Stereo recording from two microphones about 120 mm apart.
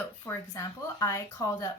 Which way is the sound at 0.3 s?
25° left (ahead or behind).